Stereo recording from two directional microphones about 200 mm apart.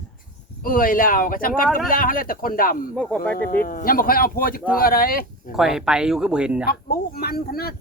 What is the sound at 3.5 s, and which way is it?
Speech, 45° left (ahead or behind).